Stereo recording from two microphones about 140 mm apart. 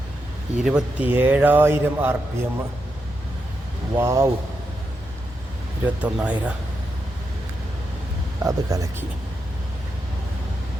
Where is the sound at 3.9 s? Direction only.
20° right (ahead or behind).